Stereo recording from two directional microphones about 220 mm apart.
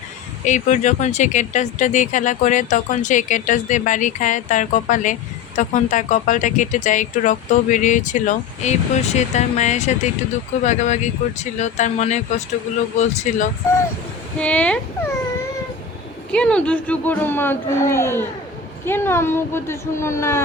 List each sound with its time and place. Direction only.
0.4 s speech: 35° left (ahead or behind)
14.3 s a child's voice: 5° left (ahead or behind)
16.3 s a child's voice: 5° left (ahead or behind)